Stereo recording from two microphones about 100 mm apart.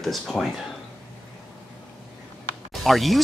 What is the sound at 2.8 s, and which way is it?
Speech, centre (ahead or behind).